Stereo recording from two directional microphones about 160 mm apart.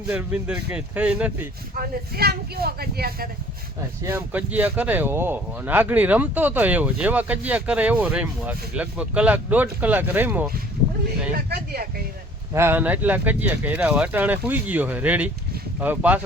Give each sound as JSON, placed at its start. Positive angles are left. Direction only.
{"t": 0.1, "sound": "speech", "side_deg": -10}
{"t": 1.7, "sound": "speech", "side_deg": -70}
{"t": 4.0, "sound": "speech", "side_deg": -10}
{"t": 11.3, "sound": "speech", "side_deg": -70}
{"t": 12.5, "sound": "speech", "side_deg": -15}